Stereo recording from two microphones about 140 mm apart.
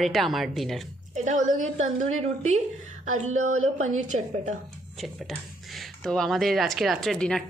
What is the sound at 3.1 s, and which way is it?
A woman's voice, 60° right (ahead or behind).